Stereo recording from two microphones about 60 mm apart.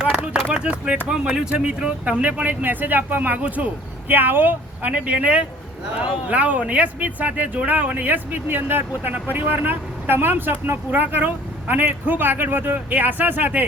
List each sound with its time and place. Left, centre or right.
0.5 s speech: centre
4.1 s speech: right